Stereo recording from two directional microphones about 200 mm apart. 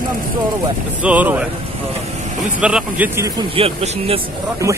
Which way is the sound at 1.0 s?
10° right (ahead or behind).